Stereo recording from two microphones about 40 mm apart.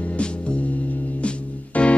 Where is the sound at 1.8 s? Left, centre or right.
Left.